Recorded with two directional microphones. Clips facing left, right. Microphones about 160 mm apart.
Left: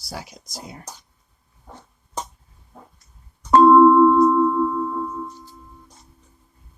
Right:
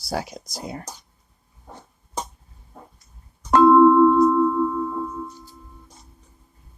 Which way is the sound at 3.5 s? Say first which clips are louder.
Left 1 dB; 70° right (ahead or behind).